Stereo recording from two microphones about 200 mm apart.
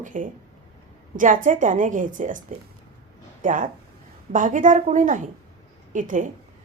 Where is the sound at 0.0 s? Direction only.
40° right (ahead or behind).